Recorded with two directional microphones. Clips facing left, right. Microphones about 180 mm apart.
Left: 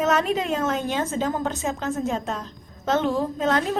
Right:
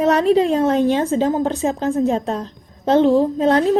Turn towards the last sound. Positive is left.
turn(degrees=-30)  # may be behind; listen again after turning